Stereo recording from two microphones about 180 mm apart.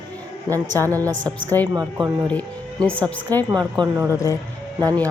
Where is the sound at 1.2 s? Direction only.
10° left (ahead or behind).